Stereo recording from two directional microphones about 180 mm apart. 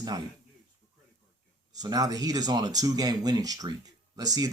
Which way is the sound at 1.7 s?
20° right (ahead or behind).